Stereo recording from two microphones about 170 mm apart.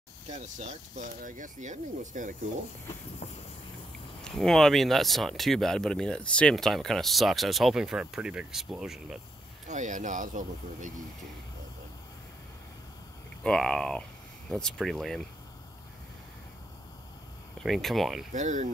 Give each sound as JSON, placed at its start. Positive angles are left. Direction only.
{"t": 0.3, "sound": "speech", "side_deg": -45}
{"t": 4.2, "sound": "speech", "side_deg": 0}
{"t": 9.7, "sound": "speech", "side_deg": -45}
{"t": 13.4, "sound": "speech", "side_deg": 5}
{"t": 17.6, "sound": "speech", "side_deg": 0}
{"t": 18.3, "sound": "speech", "side_deg": -45}